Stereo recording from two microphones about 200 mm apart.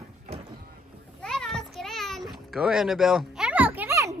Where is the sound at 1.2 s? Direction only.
5° left (ahead or behind); by 4.1 s 10° right (ahead or behind).